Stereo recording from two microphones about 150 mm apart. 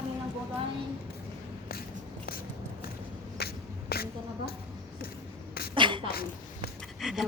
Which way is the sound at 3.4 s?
90° left.